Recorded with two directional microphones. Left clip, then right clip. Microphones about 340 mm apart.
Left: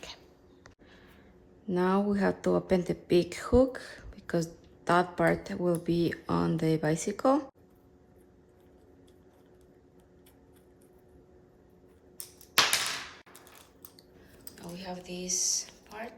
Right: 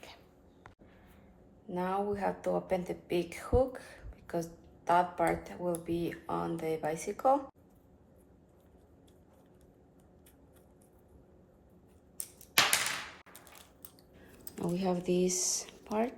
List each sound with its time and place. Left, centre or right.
1.7 s speech: left
14.5 s speech: centre